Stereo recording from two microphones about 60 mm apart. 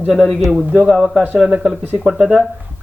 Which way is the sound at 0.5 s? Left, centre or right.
Centre.